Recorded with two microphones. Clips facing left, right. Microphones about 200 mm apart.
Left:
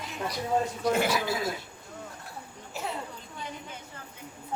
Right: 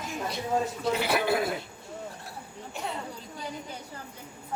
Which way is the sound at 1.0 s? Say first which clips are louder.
Right 2 dB; 60° right (ahead or behind).